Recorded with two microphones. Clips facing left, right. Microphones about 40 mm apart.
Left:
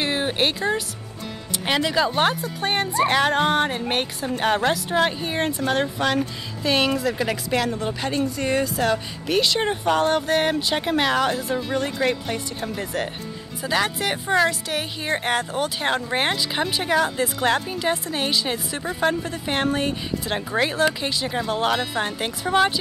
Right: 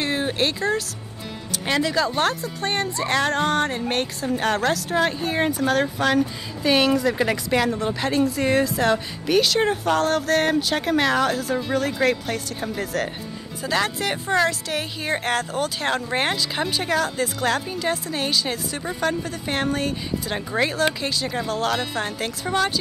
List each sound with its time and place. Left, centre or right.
0.0 s speech: left
3.2 s speech: centre
5.3 s speech: centre
6.6 s speech: centre
7.1 s speech: centre